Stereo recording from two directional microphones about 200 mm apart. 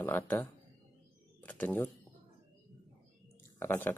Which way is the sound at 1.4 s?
5° left (ahead or behind).